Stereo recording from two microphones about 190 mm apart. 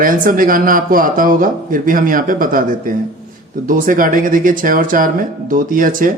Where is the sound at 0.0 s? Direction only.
45° right (ahead or behind).